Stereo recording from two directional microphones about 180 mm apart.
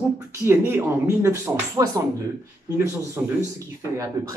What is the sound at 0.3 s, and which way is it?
Speech, 15° right (ahead or behind).